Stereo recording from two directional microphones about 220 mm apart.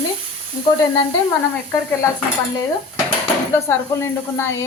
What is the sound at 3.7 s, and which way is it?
Speech, 10° left (ahead or behind).